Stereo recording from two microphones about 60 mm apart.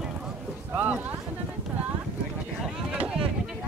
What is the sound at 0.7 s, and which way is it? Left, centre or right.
Speech, right.